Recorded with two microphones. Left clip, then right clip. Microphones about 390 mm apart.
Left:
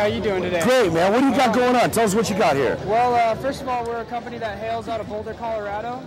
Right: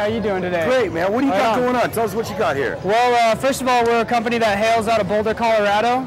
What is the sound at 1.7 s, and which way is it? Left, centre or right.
Speech, left.